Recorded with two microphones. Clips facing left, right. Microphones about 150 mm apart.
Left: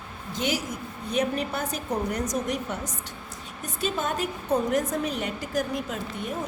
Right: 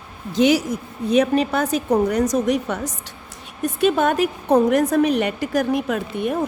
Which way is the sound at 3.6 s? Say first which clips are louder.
Right 11 dB; 65° right (ahead or behind).